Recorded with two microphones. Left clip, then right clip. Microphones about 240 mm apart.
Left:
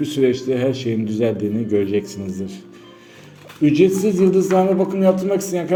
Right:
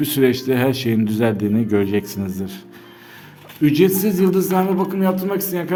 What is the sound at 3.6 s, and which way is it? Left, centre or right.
Speech, right.